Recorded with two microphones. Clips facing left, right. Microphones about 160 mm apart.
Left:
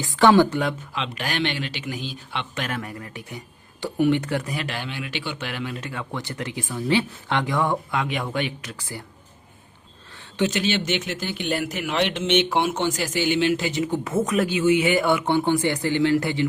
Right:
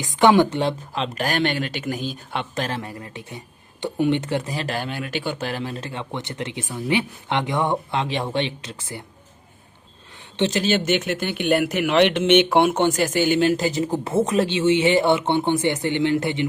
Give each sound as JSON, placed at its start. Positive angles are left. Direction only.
{"t": 0.0, "sound": "speech", "side_deg": -20}
{"t": 2.6, "sound": "speech", "side_deg": -30}
{"t": 4.6, "sound": "speech", "side_deg": -40}
{"t": 10.3, "sound": "speech", "side_deg": -30}